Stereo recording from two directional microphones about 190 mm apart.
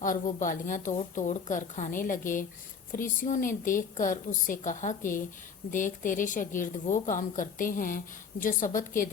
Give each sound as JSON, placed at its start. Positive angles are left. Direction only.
{"t": 0.0, "sound": "a woman's voice", "side_deg": 45}